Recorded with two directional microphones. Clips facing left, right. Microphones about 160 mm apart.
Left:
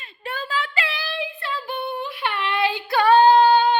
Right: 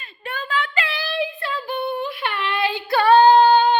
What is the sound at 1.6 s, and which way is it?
Female singing, 20° left (ahead or behind).